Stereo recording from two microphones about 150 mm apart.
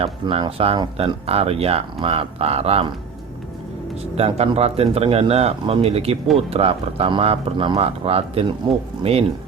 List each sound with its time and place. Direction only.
0.0 s speech: 35° right (ahead or behind)
4.2 s speech: 45° right (ahead or behind)